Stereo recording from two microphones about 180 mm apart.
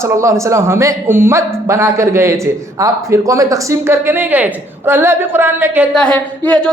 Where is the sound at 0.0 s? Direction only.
15° right (ahead or behind).